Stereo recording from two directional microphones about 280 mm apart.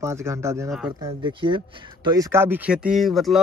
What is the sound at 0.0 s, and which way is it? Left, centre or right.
Speech, centre.